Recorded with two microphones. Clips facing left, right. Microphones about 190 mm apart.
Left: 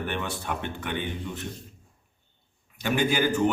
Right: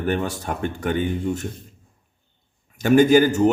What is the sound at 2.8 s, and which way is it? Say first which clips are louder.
Speech: right 10 dB; 45° right (ahead or behind).